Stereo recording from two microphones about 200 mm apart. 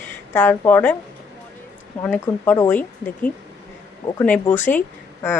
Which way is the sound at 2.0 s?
10° left (ahead or behind).